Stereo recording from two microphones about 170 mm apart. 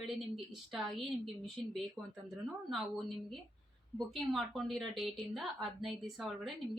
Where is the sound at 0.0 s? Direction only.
Centre (ahead or behind).